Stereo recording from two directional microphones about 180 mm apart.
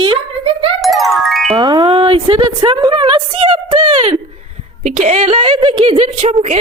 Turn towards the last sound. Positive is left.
turn(degrees=-35)  # may be behind; listen again after turning